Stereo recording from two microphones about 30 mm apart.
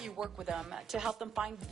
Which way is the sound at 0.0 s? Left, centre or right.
Centre.